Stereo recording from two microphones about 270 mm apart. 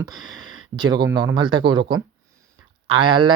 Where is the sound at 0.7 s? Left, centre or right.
Centre.